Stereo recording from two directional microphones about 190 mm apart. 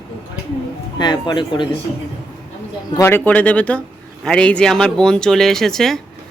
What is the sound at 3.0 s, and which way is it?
Speech, 10° left (ahead or behind).